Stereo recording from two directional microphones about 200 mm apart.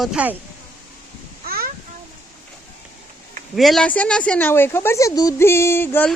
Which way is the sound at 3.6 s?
Centre (ahead or behind).